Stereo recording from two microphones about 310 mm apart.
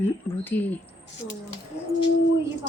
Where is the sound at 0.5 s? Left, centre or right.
Left.